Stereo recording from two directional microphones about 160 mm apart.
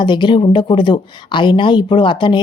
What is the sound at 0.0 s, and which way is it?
A woman's voice, 30° left (ahead or behind).